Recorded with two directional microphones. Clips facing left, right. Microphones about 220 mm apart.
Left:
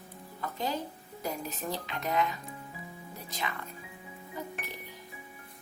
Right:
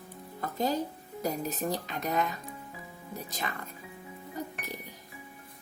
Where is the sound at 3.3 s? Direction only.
45° right (ahead or behind).